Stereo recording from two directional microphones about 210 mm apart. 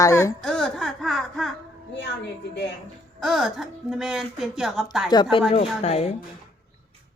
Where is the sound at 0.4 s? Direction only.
5° left (ahead or behind).